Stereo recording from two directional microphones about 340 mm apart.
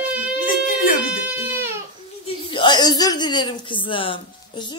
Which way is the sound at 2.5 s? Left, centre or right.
Centre.